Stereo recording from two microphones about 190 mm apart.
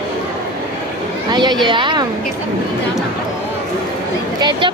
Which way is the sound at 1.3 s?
20° right (ahead or behind).